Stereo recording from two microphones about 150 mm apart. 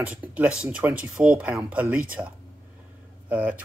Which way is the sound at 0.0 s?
10° right (ahead or behind).